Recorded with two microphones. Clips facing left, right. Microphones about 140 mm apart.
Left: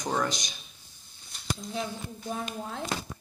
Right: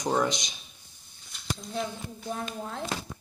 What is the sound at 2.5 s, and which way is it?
Speech, 5° left (ahead or behind).